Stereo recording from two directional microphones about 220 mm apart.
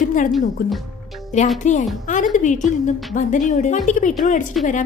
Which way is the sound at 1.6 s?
35° left (ahead or behind).